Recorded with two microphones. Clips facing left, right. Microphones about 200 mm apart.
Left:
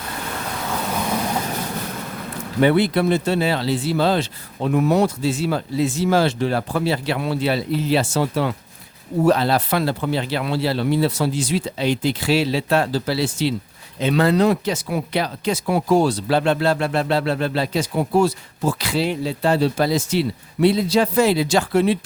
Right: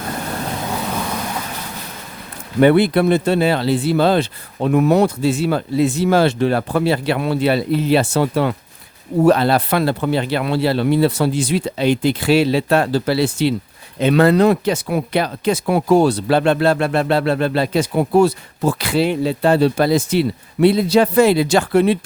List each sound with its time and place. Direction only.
2.6 s speech: 55° right (ahead or behind)